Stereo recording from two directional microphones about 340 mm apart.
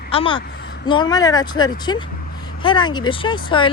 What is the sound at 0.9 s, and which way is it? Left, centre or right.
Speech, centre.